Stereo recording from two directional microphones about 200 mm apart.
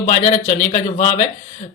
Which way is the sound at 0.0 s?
40° left (ahead or behind).